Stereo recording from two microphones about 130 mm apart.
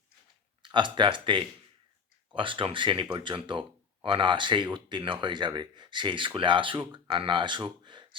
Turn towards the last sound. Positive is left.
turn(degrees=-40)  # may be behind; listen again after turning